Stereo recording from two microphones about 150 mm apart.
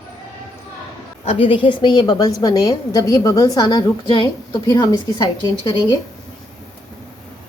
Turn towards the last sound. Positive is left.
turn(degrees=30)  # may be behind; listen again after turning